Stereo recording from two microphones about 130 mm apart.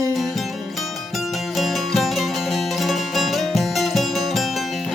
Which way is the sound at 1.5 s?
Centre (ahead or behind).